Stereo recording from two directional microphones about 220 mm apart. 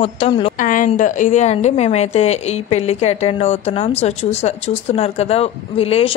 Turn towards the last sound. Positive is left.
turn(degrees=25)  # may be behind; listen again after turning